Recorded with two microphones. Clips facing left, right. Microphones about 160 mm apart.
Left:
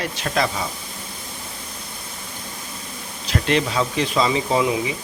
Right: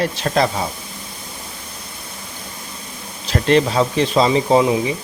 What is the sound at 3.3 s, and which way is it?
Speech, 35° right (ahead or behind).